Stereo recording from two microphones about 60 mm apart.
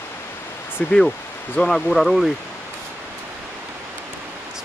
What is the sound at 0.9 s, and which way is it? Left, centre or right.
Speech, centre.